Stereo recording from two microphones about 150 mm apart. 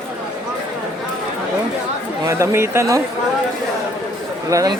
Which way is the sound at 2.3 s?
15° right (ahead or behind).